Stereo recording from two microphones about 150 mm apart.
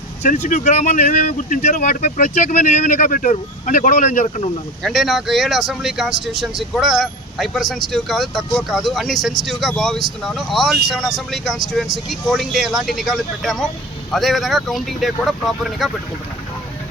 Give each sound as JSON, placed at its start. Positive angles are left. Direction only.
{"t": 0.2, "sound": "speech", "side_deg": 60}
{"t": 4.8, "sound": "speech", "side_deg": 0}